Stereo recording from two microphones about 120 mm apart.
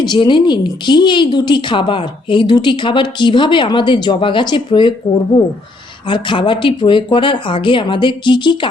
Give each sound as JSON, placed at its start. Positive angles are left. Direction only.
{"t": 0.0, "sound": "a woman's voice", "side_deg": 40}